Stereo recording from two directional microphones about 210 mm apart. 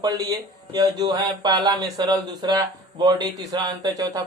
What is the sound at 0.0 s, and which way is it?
Speech, 20° right (ahead or behind).